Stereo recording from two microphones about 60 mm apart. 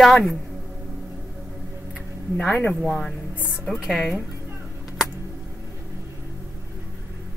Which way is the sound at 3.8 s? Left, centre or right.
Centre.